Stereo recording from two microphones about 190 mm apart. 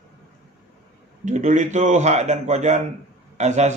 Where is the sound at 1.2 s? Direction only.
40° right (ahead or behind).